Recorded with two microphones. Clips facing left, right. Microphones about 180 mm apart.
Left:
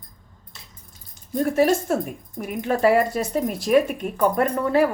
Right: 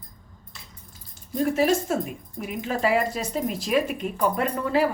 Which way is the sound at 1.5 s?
50° left (ahead or behind).